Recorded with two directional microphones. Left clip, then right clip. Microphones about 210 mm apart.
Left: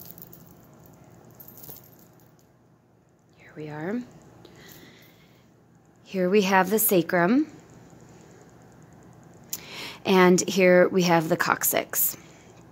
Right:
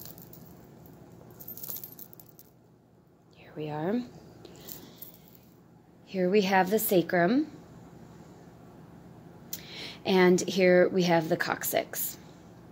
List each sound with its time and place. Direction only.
3.4 s whispering: centre (ahead or behind)
6.0 s a woman's voice: 30° left (ahead or behind)
9.5 s a woman's voice: 25° left (ahead or behind)